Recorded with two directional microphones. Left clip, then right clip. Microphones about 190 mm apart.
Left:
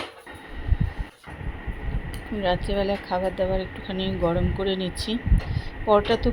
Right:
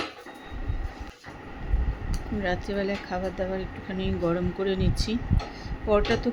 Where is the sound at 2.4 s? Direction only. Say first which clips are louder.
Left 5 dB; 5° right (ahead or behind).